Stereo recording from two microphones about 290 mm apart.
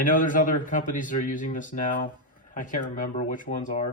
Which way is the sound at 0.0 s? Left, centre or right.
Left.